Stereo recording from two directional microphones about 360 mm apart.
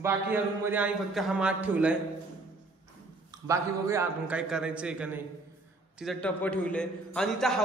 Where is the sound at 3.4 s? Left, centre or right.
Centre.